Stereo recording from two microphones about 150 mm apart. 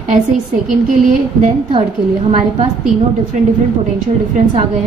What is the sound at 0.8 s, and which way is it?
Speech, 60° right (ahead or behind).